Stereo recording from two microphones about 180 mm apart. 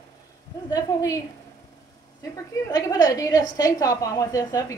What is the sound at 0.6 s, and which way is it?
Speech, 20° left (ahead or behind).